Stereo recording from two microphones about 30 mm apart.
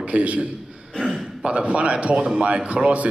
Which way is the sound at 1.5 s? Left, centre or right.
Right.